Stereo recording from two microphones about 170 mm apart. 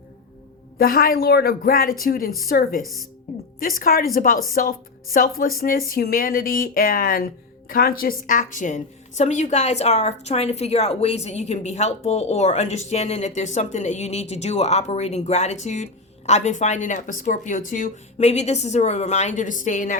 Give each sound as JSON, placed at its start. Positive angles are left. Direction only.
{"t": 0.8, "sound": "speech", "side_deg": 55}
{"t": 2.8, "sound": "speech", "side_deg": 0}
{"t": 3.3, "sound": "music", "side_deg": 55}
{"t": 3.6, "sound": "a woman's voice", "side_deg": 55}